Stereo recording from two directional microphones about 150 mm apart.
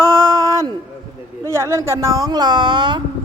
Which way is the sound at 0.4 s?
20° right (ahead or behind).